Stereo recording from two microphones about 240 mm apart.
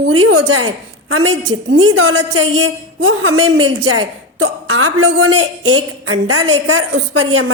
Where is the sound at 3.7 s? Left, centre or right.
Right.